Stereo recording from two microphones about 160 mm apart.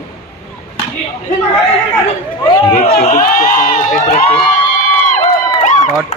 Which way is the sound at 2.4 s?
35° left (ahead or behind).